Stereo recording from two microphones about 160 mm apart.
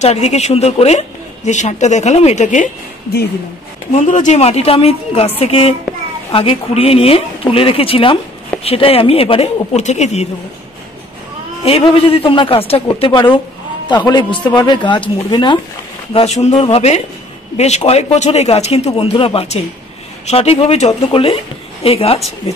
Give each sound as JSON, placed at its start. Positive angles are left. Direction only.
{"t": 0.0, "sound": "speech", "side_deg": 45}
{"t": 3.9, "sound": "speech", "side_deg": 50}
{"t": 11.8, "sound": "speech", "side_deg": 35}